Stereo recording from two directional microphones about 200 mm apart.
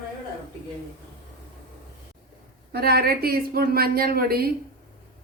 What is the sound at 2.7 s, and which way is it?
Speech, 50° right (ahead or behind).